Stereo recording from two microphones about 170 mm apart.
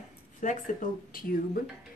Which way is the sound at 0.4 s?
50° left (ahead or behind).